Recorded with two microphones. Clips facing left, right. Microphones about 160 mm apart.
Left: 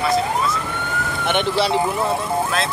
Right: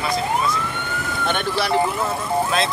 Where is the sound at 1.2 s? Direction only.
20° left (ahead or behind).